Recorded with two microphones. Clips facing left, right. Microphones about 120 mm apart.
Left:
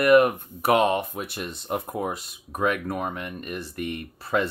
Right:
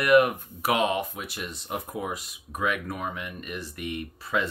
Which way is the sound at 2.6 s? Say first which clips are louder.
Left 4 dB; 50° left (ahead or behind).